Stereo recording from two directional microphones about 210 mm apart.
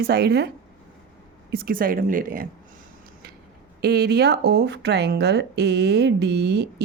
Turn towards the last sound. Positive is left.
turn(degrees=-55)  # may be behind; listen again after turning